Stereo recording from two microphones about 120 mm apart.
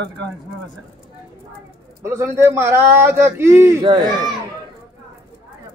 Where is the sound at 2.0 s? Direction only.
20° right (ahead or behind).